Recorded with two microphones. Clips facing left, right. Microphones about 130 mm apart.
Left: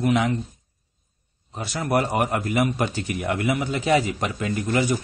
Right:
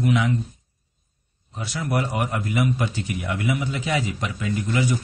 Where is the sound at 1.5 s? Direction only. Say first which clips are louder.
Left 3 dB; 45° left (ahead or behind).